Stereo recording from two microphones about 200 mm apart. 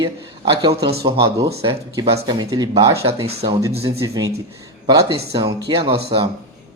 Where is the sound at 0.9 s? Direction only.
55° right (ahead or behind).